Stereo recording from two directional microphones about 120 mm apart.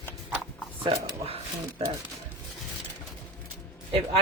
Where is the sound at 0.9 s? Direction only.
55° right (ahead or behind).